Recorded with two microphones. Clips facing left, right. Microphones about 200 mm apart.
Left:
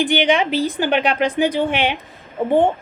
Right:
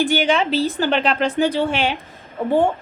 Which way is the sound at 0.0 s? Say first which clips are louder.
Left 1 dB; 15° left (ahead or behind).